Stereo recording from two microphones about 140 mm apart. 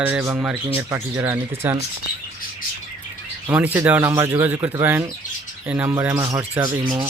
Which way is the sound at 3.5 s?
15° right (ahead or behind).